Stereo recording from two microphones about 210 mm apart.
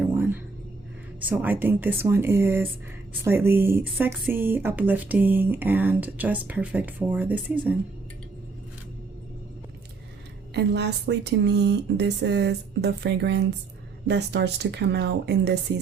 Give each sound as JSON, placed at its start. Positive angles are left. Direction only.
{"t": 0.0, "sound": "music", "side_deg": -10}
{"t": 1.2, "sound": "speech", "side_deg": -10}
{"t": 10.5, "sound": "speech", "side_deg": -55}